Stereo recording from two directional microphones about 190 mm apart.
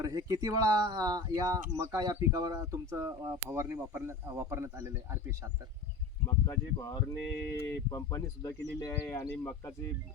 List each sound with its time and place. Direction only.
0.0 s speech: 20° right (ahead or behind)
6.2 s speech: 15° left (ahead or behind)